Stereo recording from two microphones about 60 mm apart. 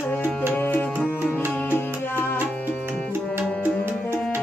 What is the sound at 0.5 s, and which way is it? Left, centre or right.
Music, left.